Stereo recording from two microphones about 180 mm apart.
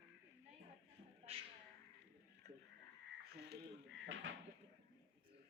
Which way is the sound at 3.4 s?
85° right.